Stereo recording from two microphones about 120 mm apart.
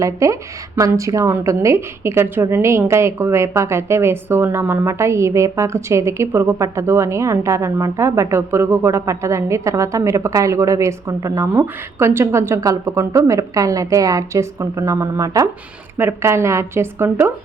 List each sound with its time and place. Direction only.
0.0 s a woman's voice: 25° right (ahead or behind)